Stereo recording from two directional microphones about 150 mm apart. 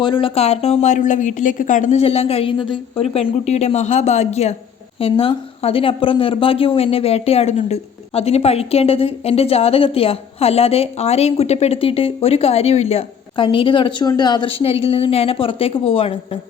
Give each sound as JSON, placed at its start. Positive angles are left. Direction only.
{"t": 0.0, "sound": "a woman's voice", "side_deg": 35}